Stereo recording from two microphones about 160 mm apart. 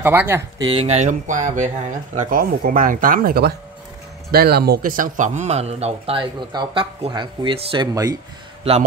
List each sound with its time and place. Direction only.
0.0 s speech: 10° right (ahead or behind)
0.7 s speech: 40° right (ahead or behind); by 8.2 s 25° right (ahead or behind)